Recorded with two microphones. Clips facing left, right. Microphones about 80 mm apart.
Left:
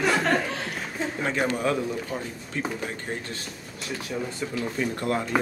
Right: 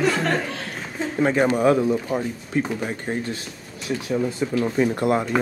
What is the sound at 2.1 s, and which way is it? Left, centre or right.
Speech, right.